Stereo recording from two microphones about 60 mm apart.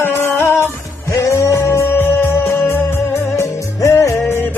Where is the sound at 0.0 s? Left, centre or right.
Left.